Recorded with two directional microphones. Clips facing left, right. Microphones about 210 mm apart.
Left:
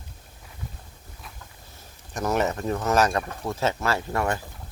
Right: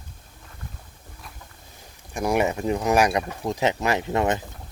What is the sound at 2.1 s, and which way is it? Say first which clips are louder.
Speech: right 2 dB; 10° right (ahead or behind).